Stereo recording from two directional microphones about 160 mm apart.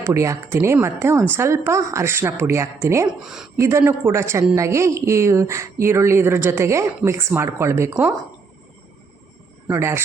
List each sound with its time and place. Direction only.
0.0 s speech: 15° right (ahead or behind)
9.6 s speech: 15° right (ahead or behind)